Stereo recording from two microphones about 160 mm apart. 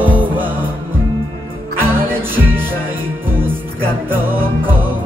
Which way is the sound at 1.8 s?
15° right (ahead or behind).